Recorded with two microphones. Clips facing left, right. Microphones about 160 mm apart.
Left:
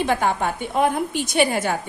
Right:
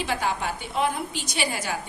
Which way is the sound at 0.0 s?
50° left (ahead or behind).